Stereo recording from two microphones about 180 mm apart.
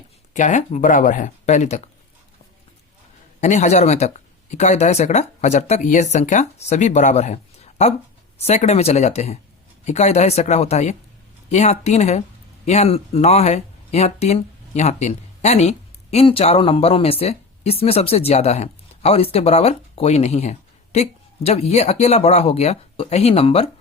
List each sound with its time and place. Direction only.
0.3 s speech: 45° left (ahead or behind)
3.4 s speech: 40° left (ahead or behind)